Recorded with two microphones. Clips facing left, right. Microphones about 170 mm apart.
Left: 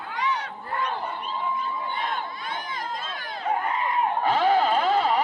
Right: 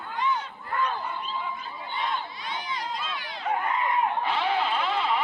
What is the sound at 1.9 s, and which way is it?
Crowd, 55° left (ahead or behind).